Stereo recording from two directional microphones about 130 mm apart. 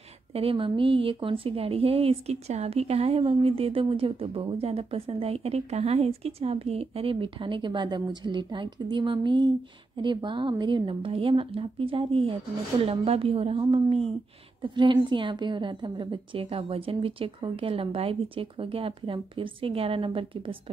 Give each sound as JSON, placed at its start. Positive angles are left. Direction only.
{"t": 0.3, "sound": "speech", "side_deg": -45}